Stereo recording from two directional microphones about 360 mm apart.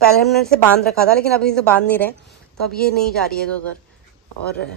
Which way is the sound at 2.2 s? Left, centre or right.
Left.